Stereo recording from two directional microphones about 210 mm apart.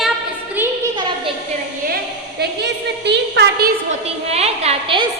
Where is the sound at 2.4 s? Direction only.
55° right (ahead or behind).